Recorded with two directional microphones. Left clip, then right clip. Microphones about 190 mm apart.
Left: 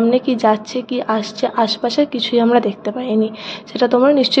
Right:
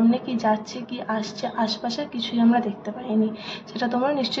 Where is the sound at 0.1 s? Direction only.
40° left (ahead or behind).